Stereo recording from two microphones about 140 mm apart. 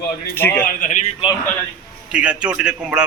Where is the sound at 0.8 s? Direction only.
60° left (ahead or behind).